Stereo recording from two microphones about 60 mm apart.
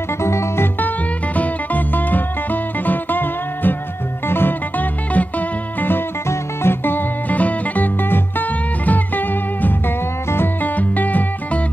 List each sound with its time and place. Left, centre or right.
0.2 s music: left
0.7 s music: left